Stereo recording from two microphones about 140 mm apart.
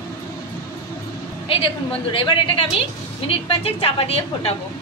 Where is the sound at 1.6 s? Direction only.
35° left (ahead or behind).